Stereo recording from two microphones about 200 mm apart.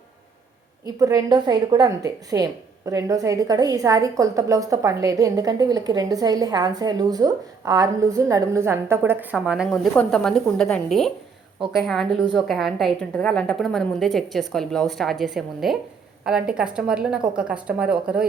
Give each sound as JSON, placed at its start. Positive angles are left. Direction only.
{"t": 0.9, "sound": "a woman's voice", "side_deg": -20}